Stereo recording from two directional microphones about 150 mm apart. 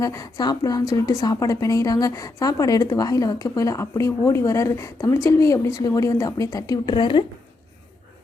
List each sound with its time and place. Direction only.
0.0 s a woman's voice: 20° left (ahead or behind)